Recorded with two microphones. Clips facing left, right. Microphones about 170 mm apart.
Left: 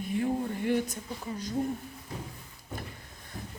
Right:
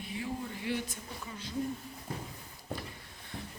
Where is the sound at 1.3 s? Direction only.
40° left (ahead or behind).